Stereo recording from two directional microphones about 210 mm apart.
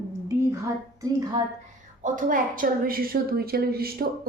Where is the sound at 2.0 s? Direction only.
40° right (ahead or behind).